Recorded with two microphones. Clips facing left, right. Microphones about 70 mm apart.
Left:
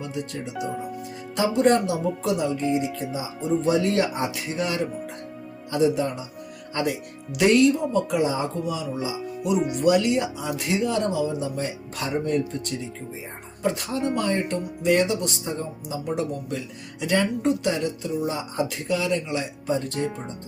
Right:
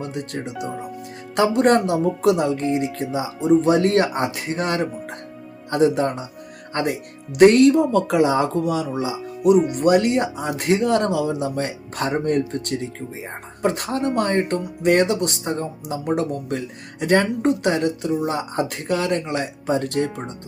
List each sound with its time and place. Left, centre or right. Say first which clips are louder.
0.0 s speech: right 3 dB; right
0.5 s speech: left 3 dB; centre
1.4 s speech: right 3 dB; right
9.7 s speech: right 3 dB; right